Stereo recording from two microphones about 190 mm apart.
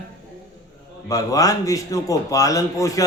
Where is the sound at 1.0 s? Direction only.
20° left (ahead or behind).